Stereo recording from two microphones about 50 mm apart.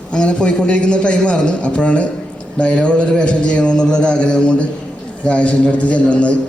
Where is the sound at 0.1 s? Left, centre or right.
Left.